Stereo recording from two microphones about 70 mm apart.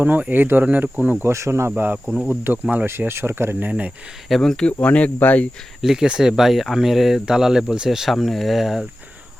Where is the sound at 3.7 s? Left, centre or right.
Right.